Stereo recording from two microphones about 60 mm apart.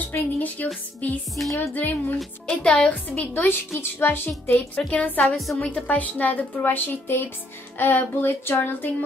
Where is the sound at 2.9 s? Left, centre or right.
Left.